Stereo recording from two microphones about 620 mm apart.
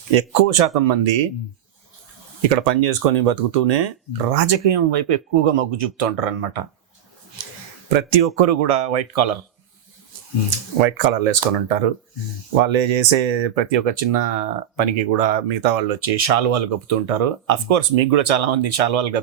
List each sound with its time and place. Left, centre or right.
0.1 s speech: right
2.4 s speech: right
7.9 s speech: right
10.8 s speech: right
12.6 s speech: right